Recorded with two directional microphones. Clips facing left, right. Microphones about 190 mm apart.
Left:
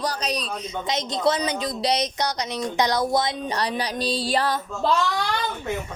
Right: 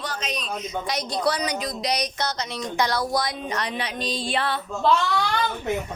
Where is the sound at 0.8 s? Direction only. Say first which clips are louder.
Left 3 dB; 20° left (ahead or behind); by 4.6 s 40° left (ahead or behind).